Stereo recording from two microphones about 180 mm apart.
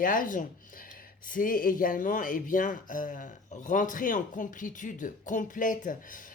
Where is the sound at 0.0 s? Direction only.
50° left (ahead or behind).